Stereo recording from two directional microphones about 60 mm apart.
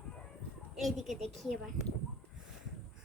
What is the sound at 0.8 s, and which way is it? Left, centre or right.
Speech, centre.